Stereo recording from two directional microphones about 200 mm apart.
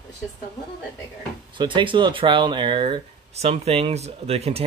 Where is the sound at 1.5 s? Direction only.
25° right (ahead or behind).